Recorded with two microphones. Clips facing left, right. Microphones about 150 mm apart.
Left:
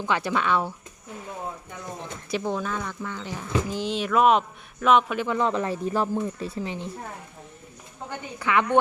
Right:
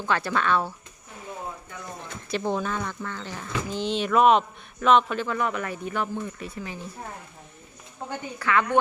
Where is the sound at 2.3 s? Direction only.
Centre (ahead or behind).